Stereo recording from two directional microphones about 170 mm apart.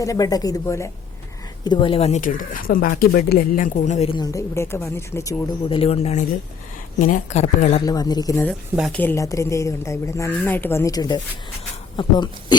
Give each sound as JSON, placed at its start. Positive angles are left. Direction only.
{"t": 0.0, "sound": "speech", "side_deg": 20}
{"t": 1.6, "sound": "speech", "side_deg": 30}
{"t": 2.2, "sound": "speech", "side_deg": 55}
{"t": 4.1, "sound": "speech", "side_deg": 20}
{"t": 5.7, "sound": "speech", "side_deg": 35}
{"t": 7.9, "sound": "speech", "side_deg": 20}
{"t": 8.9, "sound": "speech", "side_deg": 10}